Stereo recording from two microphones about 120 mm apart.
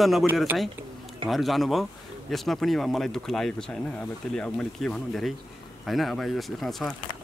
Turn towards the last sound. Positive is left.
turn(degrees=0)  # may be behind; listen again after turning